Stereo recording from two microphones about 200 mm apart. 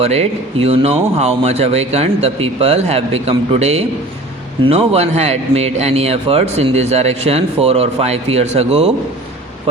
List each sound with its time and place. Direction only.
0.0 s speech: 30° right (ahead or behind)